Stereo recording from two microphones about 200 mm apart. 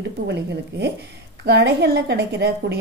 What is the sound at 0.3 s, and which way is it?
A woman's voice, 60° right (ahead or behind).